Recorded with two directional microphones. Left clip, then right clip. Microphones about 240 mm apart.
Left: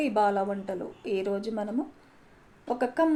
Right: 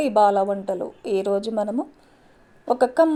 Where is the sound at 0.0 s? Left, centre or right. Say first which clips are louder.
Right 8 dB; right.